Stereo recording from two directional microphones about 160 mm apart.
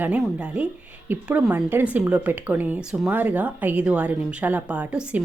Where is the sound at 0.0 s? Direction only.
10° right (ahead or behind).